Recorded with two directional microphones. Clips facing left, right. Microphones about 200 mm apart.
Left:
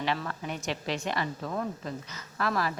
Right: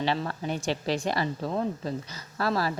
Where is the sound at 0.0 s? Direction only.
30° right (ahead or behind).